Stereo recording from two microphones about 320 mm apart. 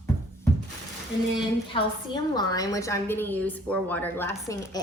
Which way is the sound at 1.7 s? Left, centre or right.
Centre.